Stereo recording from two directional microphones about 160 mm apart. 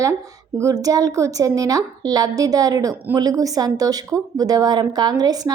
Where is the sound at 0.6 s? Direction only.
20° right (ahead or behind).